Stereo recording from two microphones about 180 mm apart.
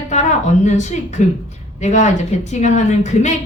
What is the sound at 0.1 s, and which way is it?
A woman's voice, 40° left (ahead or behind).